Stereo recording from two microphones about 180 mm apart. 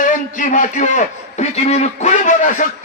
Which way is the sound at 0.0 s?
45° left (ahead or behind).